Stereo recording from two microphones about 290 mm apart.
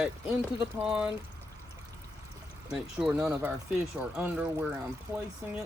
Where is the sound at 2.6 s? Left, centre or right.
Centre.